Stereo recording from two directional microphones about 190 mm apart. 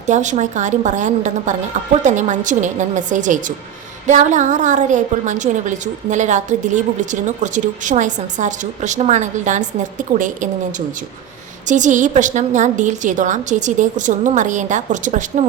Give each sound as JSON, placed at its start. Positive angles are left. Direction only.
{"t": 0.1, "sound": "a woman's voice", "side_deg": -40}